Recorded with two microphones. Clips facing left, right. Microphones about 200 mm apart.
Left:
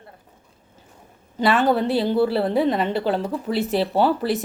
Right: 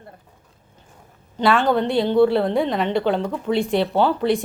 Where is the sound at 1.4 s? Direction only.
5° left (ahead or behind).